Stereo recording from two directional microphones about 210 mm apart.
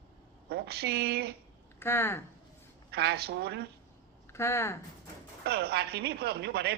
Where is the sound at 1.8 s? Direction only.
10° left (ahead or behind).